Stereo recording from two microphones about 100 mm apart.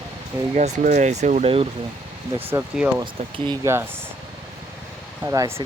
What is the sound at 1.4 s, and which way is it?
Speech, 75° right (ahead or behind).